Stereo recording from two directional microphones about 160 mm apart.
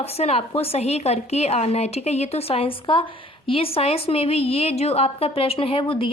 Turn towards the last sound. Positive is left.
turn(degrees=35)  # may be behind; listen again after turning